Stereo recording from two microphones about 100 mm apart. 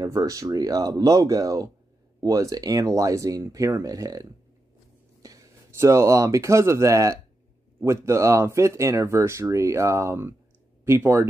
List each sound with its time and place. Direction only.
0.1 s speech: 35° right (ahead or behind)